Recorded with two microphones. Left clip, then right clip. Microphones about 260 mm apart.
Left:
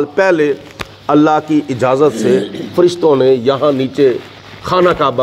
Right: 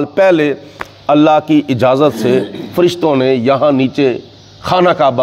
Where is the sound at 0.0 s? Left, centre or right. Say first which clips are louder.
Right 1 dB; right.